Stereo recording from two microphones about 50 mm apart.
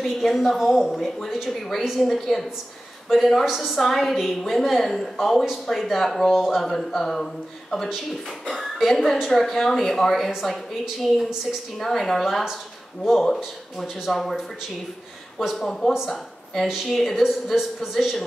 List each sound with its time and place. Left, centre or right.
0.0 s a woman's voice: centre
15.4 s a woman's voice: centre